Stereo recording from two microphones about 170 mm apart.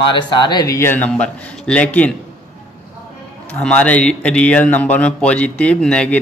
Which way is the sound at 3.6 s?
5° left (ahead or behind).